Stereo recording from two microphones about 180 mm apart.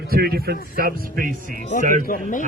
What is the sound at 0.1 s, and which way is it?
A man's voice, 60° right (ahead or behind).